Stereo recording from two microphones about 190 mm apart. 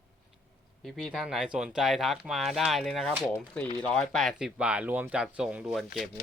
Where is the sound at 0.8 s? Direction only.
Centre (ahead or behind).